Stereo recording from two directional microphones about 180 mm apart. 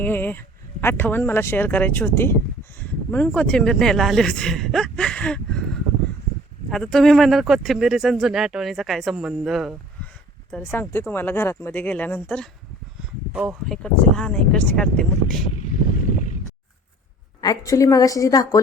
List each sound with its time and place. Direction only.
0.0 s speech: 10° left (ahead or behind)
6.7 s speech: centre (ahead or behind)
10.5 s speech: 10° left (ahead or behind)
13.3 s speech: 10° right (ahead or behind)
13.7 s speech: 5° left (ahead or behind)
15.6 s vehicle: 45° left (ahead or behind)
17.4 s a woman's voice: 20° left (ahead or behind)